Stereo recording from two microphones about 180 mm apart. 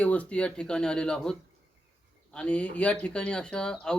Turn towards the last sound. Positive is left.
turn(degrees=5)  # may be behind; listen again after turning